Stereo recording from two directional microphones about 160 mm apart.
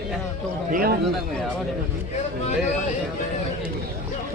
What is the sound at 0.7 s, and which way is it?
Speech, 65° right (ahead or behind).